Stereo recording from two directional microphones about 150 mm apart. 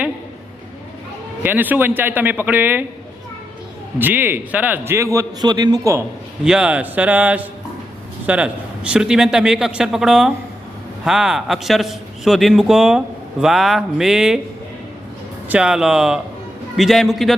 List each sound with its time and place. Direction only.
1.4 s a man's voice: 10° right (ahead or behind)
3.9 s a man's voice: 10° right (ahead or behind)
6.4 s a man's voice: 5° right (ahead or behind)
15.4 s a man's voice: 5° right (ahead or behind)